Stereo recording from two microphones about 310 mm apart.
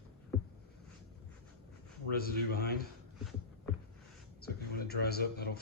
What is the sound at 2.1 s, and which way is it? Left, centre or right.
Speech, left.